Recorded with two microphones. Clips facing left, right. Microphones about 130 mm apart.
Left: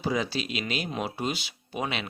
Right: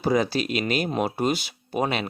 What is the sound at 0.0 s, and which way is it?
Speech, 50° right (ahead or behind).